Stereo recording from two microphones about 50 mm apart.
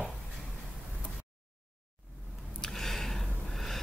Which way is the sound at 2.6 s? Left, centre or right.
Centre.